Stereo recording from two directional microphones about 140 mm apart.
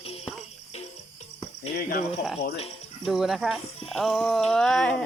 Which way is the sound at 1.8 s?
90° left.